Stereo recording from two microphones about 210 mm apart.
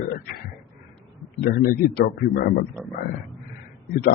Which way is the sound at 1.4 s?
45° left (ahead or behind).